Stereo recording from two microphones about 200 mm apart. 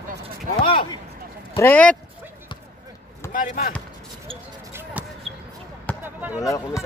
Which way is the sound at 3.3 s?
40° left (ahead or behind).